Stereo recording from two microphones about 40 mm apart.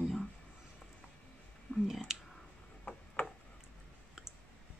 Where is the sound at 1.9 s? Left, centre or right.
Centre.